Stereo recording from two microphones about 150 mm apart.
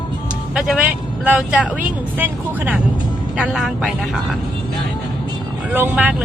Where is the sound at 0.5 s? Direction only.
5° right (ahead or behind).